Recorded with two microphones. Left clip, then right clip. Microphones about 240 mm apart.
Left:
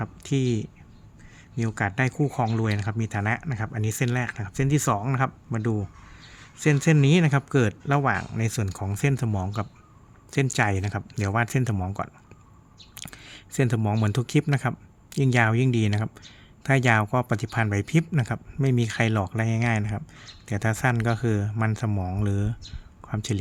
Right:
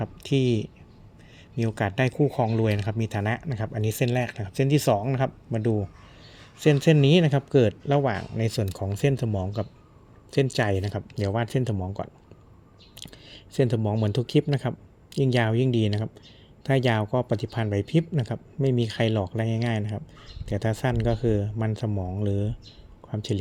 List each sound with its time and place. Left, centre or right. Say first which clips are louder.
0.0 s speech: right 3 dB; centre
1.5 s speech: even; centre
13.0 s speech: left 2 dB; centre